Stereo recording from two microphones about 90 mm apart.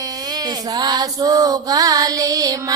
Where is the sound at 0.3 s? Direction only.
50° right (ahead or behind).